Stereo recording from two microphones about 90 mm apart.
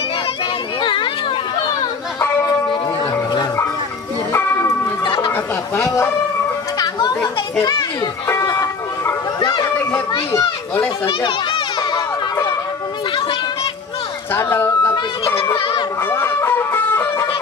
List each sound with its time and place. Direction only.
4.3 s church bell: 30° left (ahead or behind)
5.0 s music: 65° left (ahead or behind)
8.3 s music: 35° left (ahead or behind)
9.4 s speech: 50° left (ahead or behind)
11.1 s children playing: 65° left (ahead or behind)
14.6 s a sound: 25° left (ahead or behind)
16.1 s music: 25° left (ahead or behind)